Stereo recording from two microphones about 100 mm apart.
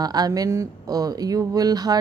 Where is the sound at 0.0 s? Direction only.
40° right (ahead or behind).